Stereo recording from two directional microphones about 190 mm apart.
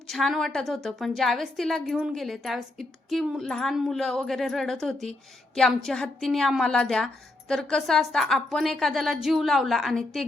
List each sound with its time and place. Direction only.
0.1 s a woman's voice: centre (ahead or behind)